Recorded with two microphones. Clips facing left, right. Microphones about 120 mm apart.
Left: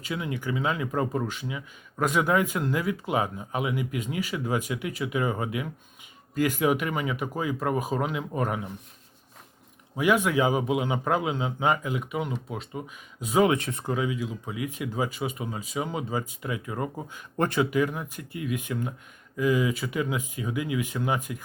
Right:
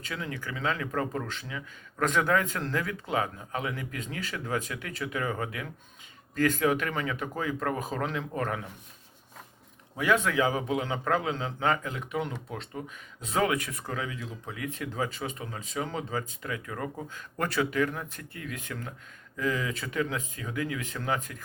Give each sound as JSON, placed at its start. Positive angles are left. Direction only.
{"t": 0.0, "sound": "speech", "side_deg": 15}
{"t": 9.9, "sound": "speech", "side_deg": 15}
{"t": 13.4, "sound": "speech", "side_deg": 25}
{"t": 13.8, "sound": "speech", "side_deg": 15}